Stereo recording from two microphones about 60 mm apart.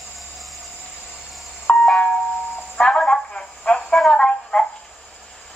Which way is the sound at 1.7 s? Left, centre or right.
Centre.